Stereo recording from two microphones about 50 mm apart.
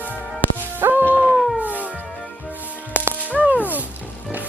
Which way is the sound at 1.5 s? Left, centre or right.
Right.